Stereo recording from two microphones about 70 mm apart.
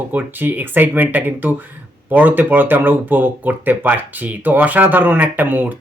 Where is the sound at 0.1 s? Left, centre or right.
Right.